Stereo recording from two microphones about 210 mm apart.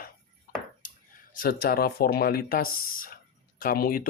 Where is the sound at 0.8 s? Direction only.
40° left (ahead or behind).